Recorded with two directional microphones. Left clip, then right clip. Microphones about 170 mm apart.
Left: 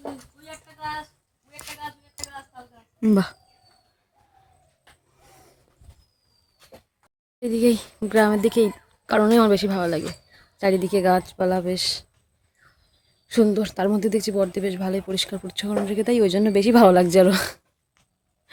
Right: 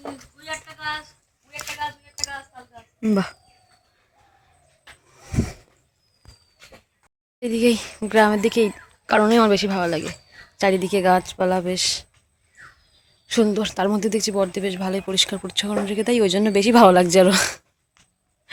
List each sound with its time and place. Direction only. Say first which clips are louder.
0.4 s a sound: right 5 dB; 60° left (ahead or behind)
7.3 s speech: right 1 dB; 5° left (ahead or behind)
13.2 s speech: even; 15° left (ahead or behind)